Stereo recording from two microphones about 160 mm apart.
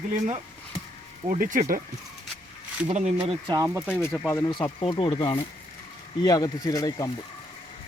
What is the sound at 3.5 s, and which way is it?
Speech, 20° right (ahead or behind).